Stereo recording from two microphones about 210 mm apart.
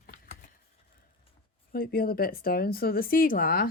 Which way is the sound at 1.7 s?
45° left (ahead or behind).